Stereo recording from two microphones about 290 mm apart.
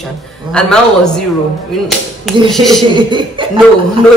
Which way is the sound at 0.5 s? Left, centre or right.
Centre.